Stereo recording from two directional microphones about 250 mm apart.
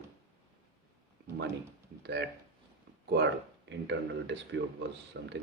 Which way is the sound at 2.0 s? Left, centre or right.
Right.